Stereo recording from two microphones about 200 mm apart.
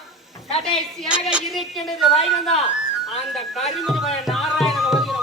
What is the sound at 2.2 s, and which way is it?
Speech, 30° left (ahead or behind).